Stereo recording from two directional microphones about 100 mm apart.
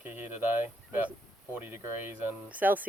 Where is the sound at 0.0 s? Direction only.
20° right (ahead or behind).